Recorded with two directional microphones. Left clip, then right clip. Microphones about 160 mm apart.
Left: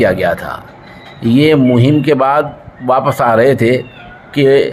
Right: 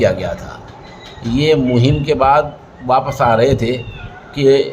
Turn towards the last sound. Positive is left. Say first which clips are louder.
# left 3 dB
turn(degrees=35)  # may be behind; listen again after turning